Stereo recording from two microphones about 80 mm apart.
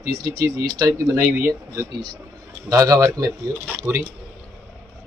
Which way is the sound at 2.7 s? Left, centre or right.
Right.